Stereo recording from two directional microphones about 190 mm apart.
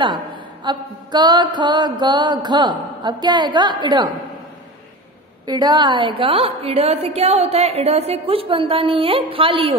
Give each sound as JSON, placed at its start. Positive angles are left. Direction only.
{"t": 0.7, "sound": "a woman's voice", "side_deg": -25}
{"t": 5.5, "sound": "a woman's voice", "side_deg": -20}